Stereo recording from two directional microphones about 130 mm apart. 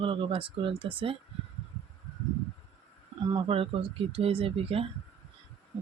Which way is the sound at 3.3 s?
45° right (ahead or behind).